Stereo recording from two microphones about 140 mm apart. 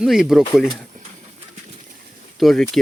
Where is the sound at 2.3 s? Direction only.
Centre (ahead or behind).